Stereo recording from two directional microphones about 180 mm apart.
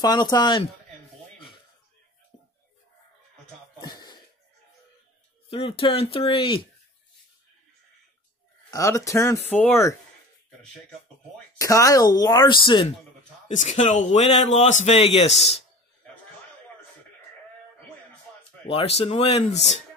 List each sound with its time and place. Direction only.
0.0 s speech: 20° left (ahead or behind)
3.8 s throat clearing: 25° left (ahead or behind)
5.5 s speech: 30° left (ahead or behind)
8.6 s speech: 15° left (ahead or behind)
11.5 s speech: 20° left (ahead or behind)
13.5 s speech: 40° left (ahead or behind)
18.7 s speech: 35° left (ahead or behind)